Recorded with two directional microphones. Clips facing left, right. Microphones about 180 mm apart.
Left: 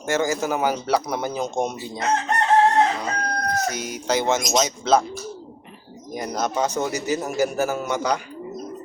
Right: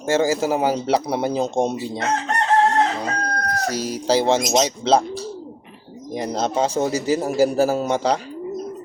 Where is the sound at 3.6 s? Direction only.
30° right (ahead or behind).